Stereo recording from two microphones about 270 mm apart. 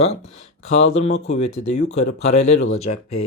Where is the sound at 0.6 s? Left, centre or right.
Left.